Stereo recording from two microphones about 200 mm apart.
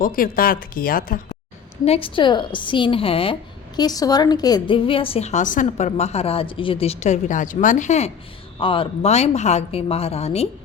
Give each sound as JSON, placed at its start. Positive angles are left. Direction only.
{"t": 0.0, "sound": "speech", "side_deg": 45}
{"t": 1.8, "sound": "a woman's voice", "side_deg": 30}